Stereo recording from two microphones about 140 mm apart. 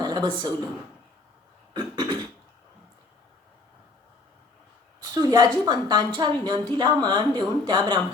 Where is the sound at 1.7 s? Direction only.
30° right (ahead or behind).